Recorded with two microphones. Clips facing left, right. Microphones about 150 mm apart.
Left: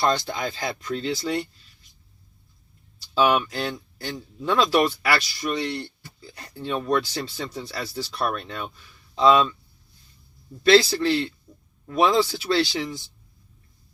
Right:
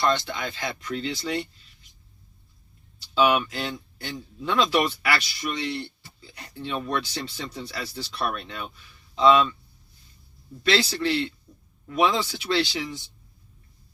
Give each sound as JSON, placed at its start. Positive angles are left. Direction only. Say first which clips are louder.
{"t": 0.0, "sound": "speech", "louder": "left 1 dB", "side_deg": 35}
{"t": 3.2, "sound": "speech", "louder": "left 1 dB", "side_deg": 35}
{"t": 10.6, "sound": "speech", "louder": "left 7 dB", "side_deg": 35}